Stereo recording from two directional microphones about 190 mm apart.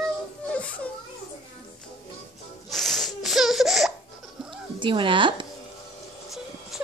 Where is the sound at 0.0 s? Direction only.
5° left (ahead or behind).